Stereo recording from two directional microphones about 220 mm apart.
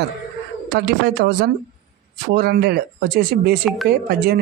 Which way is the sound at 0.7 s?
50° right (ahead or behind).